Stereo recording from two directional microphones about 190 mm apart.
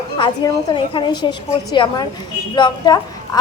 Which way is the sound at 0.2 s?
25° left (ahead or behind).